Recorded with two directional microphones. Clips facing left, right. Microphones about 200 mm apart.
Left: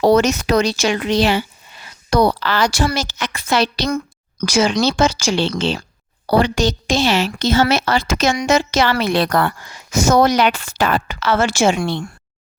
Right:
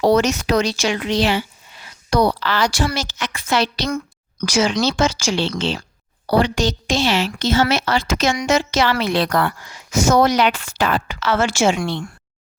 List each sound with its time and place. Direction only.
0.0 s speech: 45° left (ahead or behind)
4.4 s speech: 55° left (ahead or behind)
4.9 s speech: 35° left (ahead or behind)
5.3 s a woman's voice: 55° left (ahead or behind)